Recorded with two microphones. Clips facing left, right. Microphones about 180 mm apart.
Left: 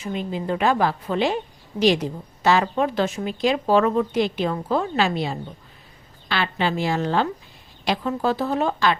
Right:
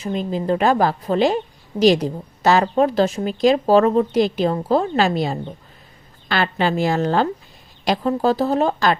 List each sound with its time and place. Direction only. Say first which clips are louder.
0.0 s a woman's voice: right 4 dB; 40° right (ahead or behind)